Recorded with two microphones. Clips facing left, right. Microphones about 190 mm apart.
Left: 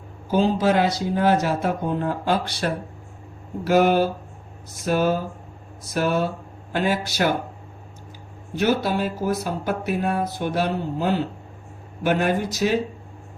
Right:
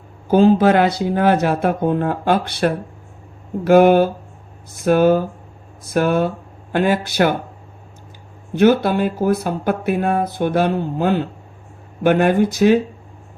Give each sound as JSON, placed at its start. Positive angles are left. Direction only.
{"t": 0.3, "sound": "speech", "side_deg": -55}
{"t": 8.5, "sound": "speech", "side_deg": -55}